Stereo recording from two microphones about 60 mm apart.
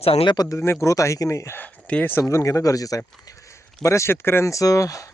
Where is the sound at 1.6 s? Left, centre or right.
Left.